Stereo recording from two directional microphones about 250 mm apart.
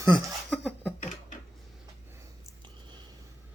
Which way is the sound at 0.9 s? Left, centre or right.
Left.